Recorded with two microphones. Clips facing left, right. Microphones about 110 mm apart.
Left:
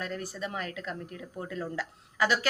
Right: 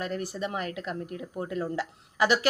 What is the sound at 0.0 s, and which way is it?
A woman's voice, 20° right (ahead or behind).